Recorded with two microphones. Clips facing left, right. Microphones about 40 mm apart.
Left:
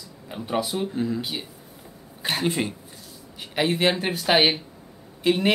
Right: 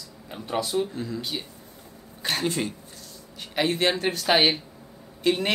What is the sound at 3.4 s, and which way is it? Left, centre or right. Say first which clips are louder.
Speech: left 2 dB; centre.